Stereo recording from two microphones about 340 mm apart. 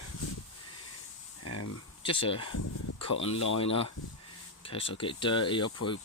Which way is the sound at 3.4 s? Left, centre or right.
Left.